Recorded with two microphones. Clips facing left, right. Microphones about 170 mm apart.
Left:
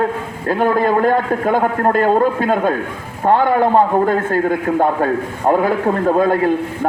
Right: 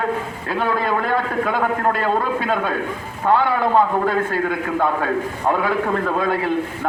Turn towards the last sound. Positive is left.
turn(degrees=45)  # may be behind; listen again after turning